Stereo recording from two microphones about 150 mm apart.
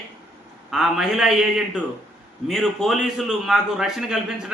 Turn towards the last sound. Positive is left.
turn(degrees=-5)  # may be behind; listen again after turning